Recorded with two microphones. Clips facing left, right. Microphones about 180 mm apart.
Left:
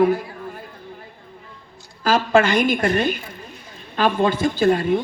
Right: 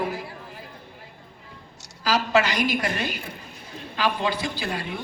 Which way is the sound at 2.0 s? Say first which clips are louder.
Left 5 dB; 50° left (ahead or behind).